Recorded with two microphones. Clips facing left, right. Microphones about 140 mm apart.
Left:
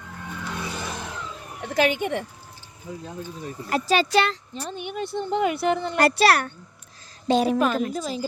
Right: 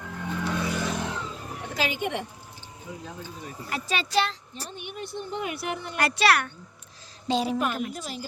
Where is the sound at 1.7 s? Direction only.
60° left (ahead or behind).